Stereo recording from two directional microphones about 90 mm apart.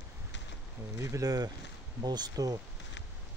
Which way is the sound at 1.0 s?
35° right (ahead or behind).